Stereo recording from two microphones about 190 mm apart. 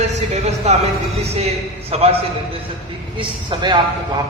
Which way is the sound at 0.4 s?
35° right (ahead or behind).